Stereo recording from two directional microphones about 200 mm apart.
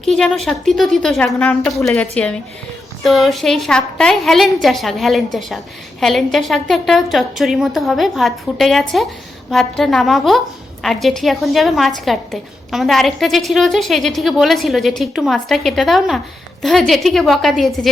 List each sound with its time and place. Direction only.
0.0 s a woman's voice: centre (ahead or behind)